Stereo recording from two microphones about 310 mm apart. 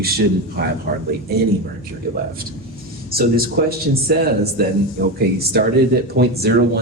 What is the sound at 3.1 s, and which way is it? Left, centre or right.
A man's voice, right.